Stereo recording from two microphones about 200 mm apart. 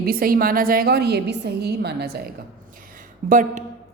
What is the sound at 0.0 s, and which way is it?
A woman's voice, 45° right (ahead or behind).